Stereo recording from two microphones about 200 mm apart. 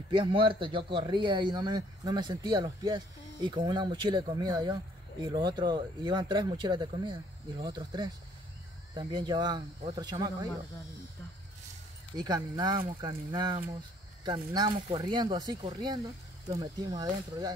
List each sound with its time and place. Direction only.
0.1 s speech: 25° right (ahead or behind)
12.2 s speech: 20° right (ahead or behind)